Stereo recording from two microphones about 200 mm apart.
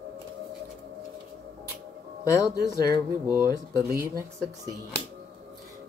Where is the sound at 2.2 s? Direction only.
15° left (ahead or behind).